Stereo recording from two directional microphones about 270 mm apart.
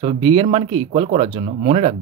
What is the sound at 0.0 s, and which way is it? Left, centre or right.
Speech, centre.